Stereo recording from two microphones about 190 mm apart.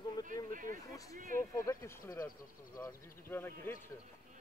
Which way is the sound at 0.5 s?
45° right (ahead or behind).